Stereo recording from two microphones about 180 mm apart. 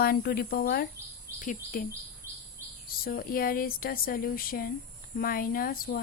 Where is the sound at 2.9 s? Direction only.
55° left (ahead or behind).